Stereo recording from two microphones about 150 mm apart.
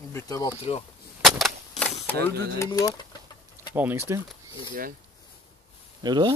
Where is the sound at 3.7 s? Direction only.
15° right (ahead or behind).